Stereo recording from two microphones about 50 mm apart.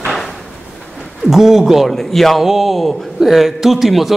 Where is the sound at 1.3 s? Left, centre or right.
Centre.